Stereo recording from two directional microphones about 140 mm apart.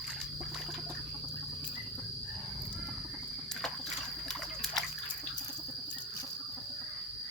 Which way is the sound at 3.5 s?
5° left (ahead or behind).